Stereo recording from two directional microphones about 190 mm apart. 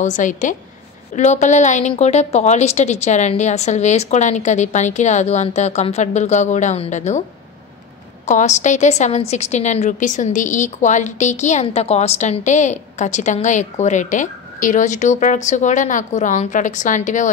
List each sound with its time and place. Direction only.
0.0 s a woman's voice: 40° left (ahead or behind)
8.3 s a woman's voice: 40° left (ahead or behind)